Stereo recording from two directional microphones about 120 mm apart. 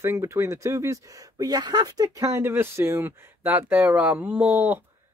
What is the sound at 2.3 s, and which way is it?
Speech, 20° right (ahead or behind).